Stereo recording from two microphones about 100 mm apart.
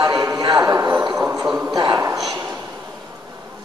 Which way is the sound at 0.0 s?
35° right (ahead or behind).